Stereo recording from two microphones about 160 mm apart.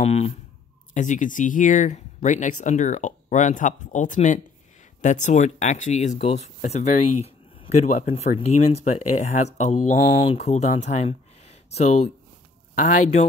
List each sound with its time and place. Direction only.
0.0 s speech: 40° left (ahead or behind)
0.9 s speech: 50° left (ahead or behind)